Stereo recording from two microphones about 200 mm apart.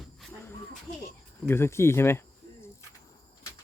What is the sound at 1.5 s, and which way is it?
Speech, 10° left (ahead or behind).